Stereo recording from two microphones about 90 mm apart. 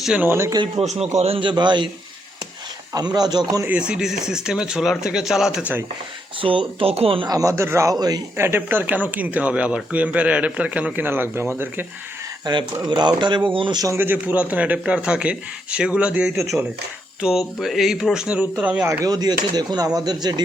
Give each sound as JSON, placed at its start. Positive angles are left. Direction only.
{"t": 0.2, "sound": "speech", "side_deg": -25}
{"t": 0.8, "sound": "a man's voice", "side_deg": -90}
{"t": 1.3, "sound": "speech", "side_deg": -65}
{"t": 2.9, "sound": "speech", "side_deg": -50}
{"t": 3.7, "sound": "speech", "side_deg": -10}
{"t": 6.4, "sound": "speech", "side_deg": -75}
{"t": 7.3, "sound": "speech", "side_deg": -40}
{"t": 7.9, "sound": "speech", "side_deg": -45}
{"t": 8.4, "sound": "speech", "side_deg": -25}
{"t": 12.5, "sound": "speech", "side_deg": -55}
{"t": 13.9, "sound": "speech", "side_deg": -20}
{"t": 16.4, "sound": "speech", "side_deg": 0}
{"t": 19.0, "sound": "speech", "side_deg": -45}